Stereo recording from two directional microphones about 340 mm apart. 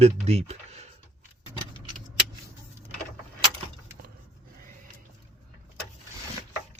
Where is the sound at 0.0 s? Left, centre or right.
Centre.